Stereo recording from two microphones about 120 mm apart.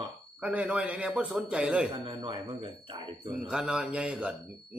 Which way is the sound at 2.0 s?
40° right (ahead or behind).